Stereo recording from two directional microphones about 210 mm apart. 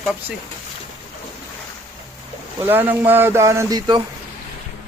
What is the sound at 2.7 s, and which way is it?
Speech, 10° right (ahead or behind).